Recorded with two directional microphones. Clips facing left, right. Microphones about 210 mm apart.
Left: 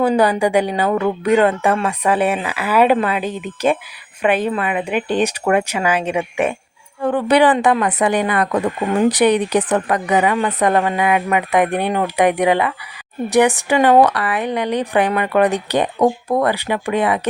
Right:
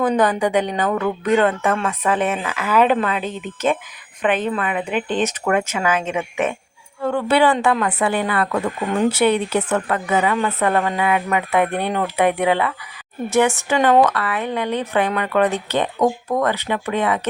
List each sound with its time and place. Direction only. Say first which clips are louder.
0.0 s speech: left 3 dB; 10° left (ahead or behind)